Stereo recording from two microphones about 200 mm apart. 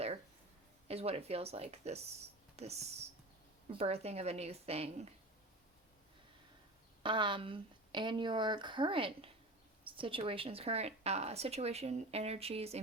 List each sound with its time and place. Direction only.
0.9 s a woman's voice: 30° right (ahead or behind)
7.0 s a woman's voice: 25° right (ahead or behind)